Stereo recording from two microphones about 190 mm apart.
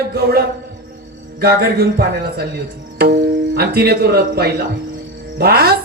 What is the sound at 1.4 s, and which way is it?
Speech, 55° right (ahead or behind).